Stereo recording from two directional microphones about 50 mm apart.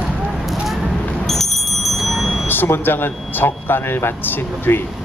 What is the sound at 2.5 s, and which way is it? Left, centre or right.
Speech, left.